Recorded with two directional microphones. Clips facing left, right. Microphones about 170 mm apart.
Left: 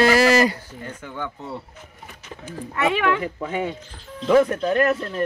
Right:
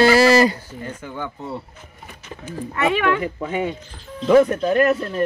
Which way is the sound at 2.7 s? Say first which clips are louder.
Right 1 dB; 10° left (ahead or behind).